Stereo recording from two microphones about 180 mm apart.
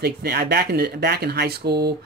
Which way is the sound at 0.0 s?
60° right (ahead or behind).